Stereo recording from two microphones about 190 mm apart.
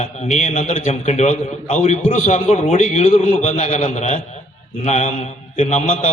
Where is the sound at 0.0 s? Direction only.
35° left (ahead or behind).